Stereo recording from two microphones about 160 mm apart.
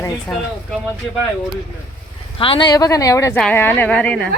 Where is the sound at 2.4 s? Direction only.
30° left (ahead or behind); by 4.3 s 10° left (ahead or behind).